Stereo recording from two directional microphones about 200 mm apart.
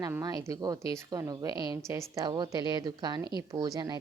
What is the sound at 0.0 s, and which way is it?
A woman's voice, 20° right (ahead or behind).